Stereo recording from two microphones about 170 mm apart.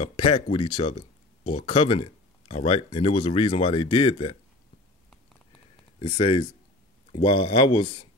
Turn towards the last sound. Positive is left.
turn(degrees=30)  # may be behind; listen again after turning